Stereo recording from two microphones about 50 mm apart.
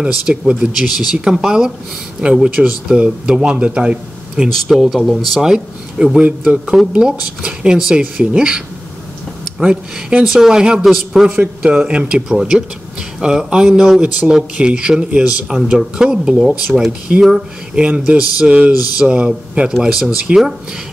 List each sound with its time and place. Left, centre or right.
0.0 s speech: right
0.6 s speech: centre; by 4.0 s right
4.4 s speech: centre
5.4 s speech: centre
6.2 s speech: right; by 11.2 s centre
11.6 s speech: centre
17.1 s speech: right; by 20.5 s centre